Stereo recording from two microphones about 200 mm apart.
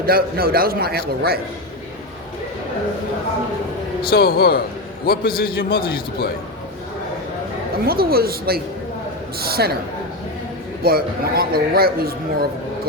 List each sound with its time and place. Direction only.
0.0 s speech: 50° right (ahead or behind)
4.0 s a man's voice: 50° left (ahead or behind)
7.9 s speech: 50° right (ahead or behind)
10.8 s speech: 50° right (ahead or behind)